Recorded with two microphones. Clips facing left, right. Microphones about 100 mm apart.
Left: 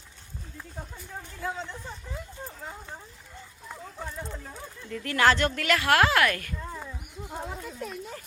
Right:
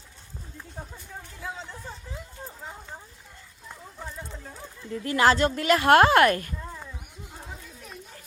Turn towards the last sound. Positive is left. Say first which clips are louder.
# right 5 dB
turn(degrees=-30)  # may be behind; listen again after turning